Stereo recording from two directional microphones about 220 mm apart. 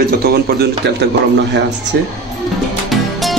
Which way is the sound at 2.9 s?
Centre (ahead or behind).